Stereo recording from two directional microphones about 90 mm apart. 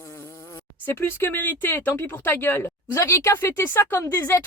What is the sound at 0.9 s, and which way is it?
Speech, 25° left (ahead or behind).